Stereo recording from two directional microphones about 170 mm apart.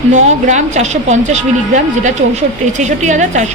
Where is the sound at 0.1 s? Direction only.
45° right (ahead or behind).